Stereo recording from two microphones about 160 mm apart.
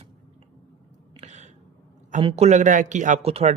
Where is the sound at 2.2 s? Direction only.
35° right (ahead or behind).